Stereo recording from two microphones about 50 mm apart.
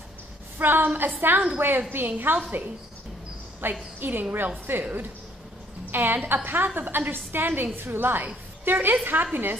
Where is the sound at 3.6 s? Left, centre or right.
Right.